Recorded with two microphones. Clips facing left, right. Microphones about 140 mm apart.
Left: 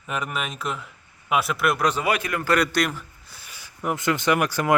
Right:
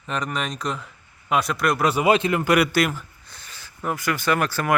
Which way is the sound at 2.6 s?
5° right (ahead or behind).